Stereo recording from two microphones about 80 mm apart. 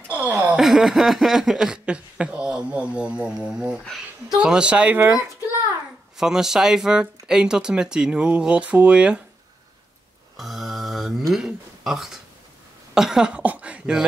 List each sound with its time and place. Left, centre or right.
0.1 s a sound: centre
0.6 s speech: centre; by 5.2 s right
6.1 s speech: centre
10.3 s speech: centre